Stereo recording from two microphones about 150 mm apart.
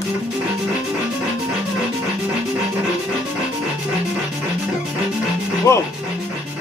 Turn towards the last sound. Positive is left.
turn(degrees=20)  # may be behind; listen again after turning